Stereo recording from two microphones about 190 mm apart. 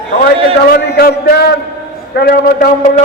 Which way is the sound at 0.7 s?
55° left (ahead or behind).